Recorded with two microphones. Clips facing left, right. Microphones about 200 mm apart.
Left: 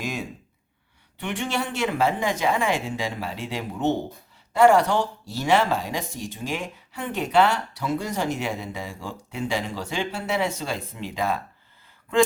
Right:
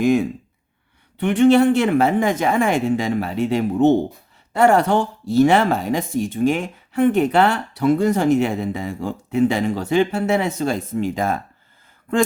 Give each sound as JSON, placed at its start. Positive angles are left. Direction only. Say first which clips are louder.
{"t": 0.0, "sound": "speech", "louder": "right 14 dB", "side_deg": -55}